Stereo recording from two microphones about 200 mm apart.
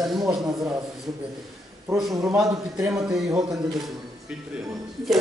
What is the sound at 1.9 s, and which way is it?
Speech, centre (ahead or behind).